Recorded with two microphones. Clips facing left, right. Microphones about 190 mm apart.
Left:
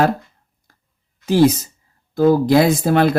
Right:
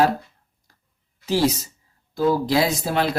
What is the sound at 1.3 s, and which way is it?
Speech, 50° left (ahead or behind).